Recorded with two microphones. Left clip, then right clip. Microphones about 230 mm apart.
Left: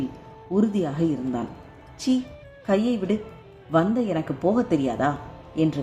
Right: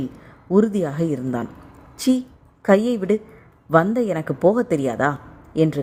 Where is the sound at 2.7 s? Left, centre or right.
Right.